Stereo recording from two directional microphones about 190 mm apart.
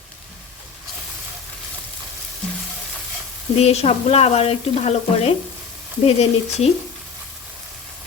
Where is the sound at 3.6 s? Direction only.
35° left (ahead or behind).